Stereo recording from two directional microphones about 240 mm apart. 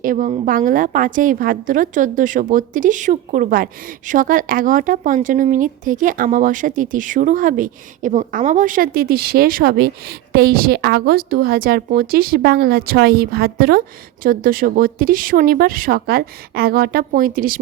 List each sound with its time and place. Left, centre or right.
0.0 s a woman's voice: right